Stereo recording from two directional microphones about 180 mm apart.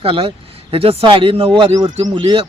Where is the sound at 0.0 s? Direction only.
30° right (ahead or behind).